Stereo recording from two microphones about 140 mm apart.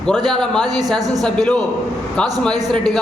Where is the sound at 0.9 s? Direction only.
25° right (ahead or behind).